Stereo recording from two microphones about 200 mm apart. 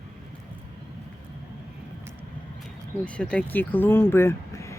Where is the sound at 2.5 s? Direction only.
5° left (ahead or behind).